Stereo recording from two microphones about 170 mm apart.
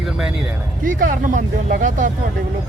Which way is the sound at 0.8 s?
50° right (ahead or behind).